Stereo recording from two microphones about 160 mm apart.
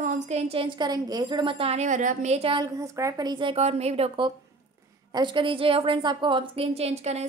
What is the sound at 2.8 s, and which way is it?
A woman's voice, 20° right (ahead or behind).